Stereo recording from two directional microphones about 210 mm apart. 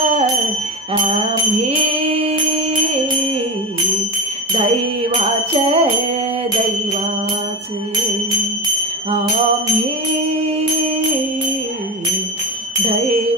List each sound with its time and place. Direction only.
0.9 s jingle bell: 30° right (ahead or behind)
4.6 s jingle bell: 30° right (ahead or behind)
12.8 s music: 30° right (ahead or behind)